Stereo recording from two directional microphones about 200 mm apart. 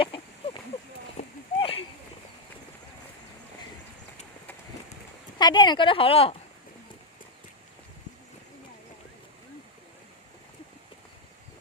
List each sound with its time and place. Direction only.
0.0 s a sound: 25° left (ahead or behind)
1.1 s clip-clop: 30° left (ahead or behind)
5.4 s a woman's voice: 20° left (ahead or behind)